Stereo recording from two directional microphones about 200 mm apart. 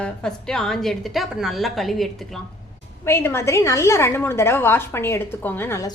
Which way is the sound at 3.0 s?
10° left (ahead or behind).